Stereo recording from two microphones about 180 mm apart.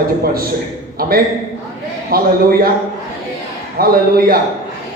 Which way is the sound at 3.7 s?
55° right (ahead or behind).